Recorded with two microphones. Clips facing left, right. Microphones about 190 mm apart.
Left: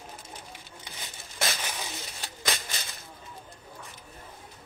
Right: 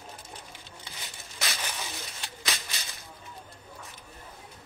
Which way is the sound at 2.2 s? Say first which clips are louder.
Left 4 dB; 50° left (ahead or behind).